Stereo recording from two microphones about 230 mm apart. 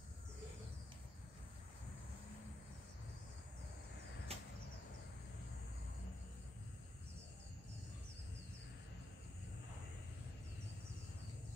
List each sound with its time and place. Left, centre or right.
4.3 s arrow: right